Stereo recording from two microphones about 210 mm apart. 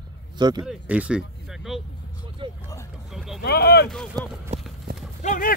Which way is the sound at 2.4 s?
25° right (ahead or behind).